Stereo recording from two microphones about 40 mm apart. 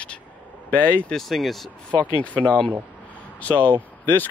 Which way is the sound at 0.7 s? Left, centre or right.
Left.